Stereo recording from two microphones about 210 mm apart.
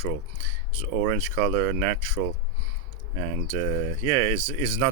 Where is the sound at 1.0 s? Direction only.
10° right (ahead or behind).